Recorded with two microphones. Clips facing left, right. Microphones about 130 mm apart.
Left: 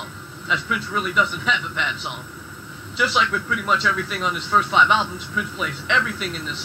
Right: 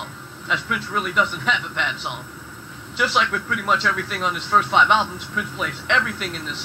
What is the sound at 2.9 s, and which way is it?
Speech, 50° right (ahead or behind).